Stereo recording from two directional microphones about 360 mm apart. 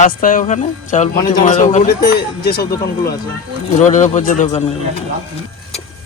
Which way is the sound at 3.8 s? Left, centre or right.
Centre.